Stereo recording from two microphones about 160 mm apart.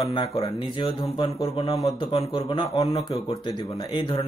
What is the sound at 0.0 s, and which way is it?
Speech, 25° left (ahead or behind).